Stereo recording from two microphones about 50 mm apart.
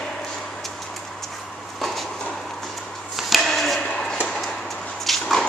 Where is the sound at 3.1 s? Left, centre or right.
Centre.